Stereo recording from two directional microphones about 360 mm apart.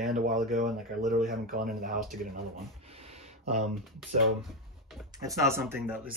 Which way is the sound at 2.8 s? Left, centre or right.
Centre.